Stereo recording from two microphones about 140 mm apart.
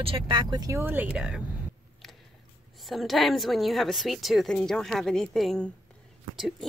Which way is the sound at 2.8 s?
Centre (ahead or behind).